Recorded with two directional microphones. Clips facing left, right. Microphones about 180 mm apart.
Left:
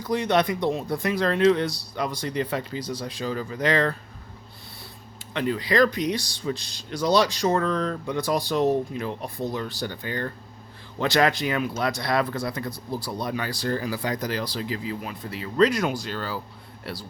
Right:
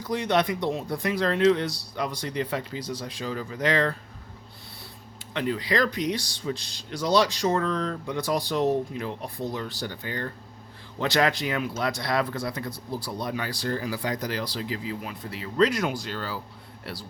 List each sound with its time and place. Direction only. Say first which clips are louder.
0.1 s speech: left 2 dB; 40° left (ahead or behind)
5.3 s speech: left 2 dB; 45° left (ahead or behind)